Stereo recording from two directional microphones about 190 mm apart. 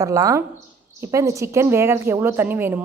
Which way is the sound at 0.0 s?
15° right (ahead or behind).